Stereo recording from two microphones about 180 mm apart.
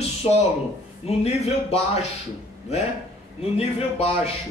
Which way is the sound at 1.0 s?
35° left (ahead or behind).